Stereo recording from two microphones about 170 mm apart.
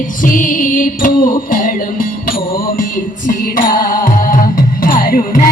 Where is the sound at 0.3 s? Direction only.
55° left (ahead or behind).